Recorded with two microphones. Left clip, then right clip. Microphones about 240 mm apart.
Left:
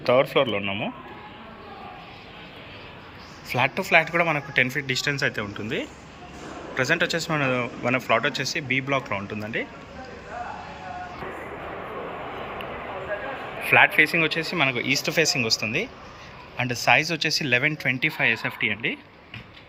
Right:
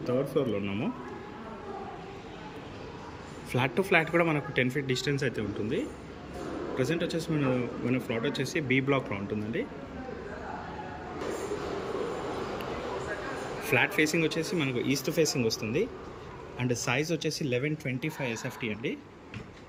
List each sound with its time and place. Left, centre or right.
0.0 s speech: centre
0.3 s speech: centre
3.5 s speech: centre
13.7 s speech: centre